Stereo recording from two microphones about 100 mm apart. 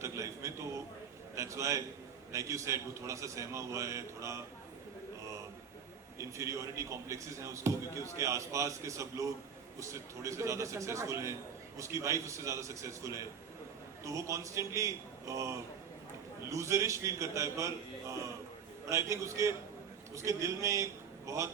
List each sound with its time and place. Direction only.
0.0 s a sound: 30° right (ahead or behind)
1.4 s speech: 30° right (ahead or behind)
6.1 s speech: 30° right (ahead or behind)
18.9 s a man's voice: 30° right (ahead or behind)